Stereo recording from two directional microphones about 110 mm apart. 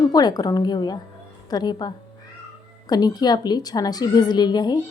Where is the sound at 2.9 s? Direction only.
35° left (ahead or behind).